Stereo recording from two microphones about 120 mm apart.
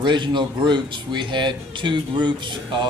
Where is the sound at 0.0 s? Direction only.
40° right (ahead or behind).